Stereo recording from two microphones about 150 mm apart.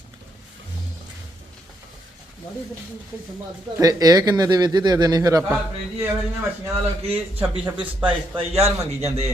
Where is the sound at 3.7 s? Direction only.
25° right (ahead or behind).